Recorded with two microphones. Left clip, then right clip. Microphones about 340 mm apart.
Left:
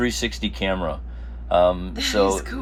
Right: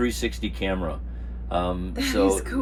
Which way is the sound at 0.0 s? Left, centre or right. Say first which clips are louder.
Left 2 dB; left.